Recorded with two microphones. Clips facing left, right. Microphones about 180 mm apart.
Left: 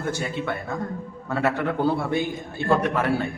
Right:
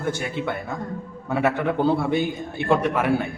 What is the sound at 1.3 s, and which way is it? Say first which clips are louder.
A man's voice: right 2 dB; 15° right (ahead or behind).